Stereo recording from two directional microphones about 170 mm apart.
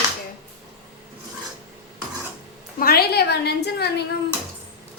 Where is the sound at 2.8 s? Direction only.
65° left (ahead or behind).